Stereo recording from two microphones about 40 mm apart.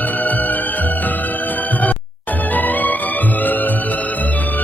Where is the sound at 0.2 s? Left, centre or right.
Left.